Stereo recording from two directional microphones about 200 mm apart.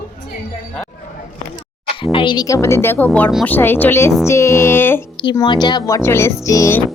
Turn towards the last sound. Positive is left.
turn(degrees=15)  # may be behind; listen again after turning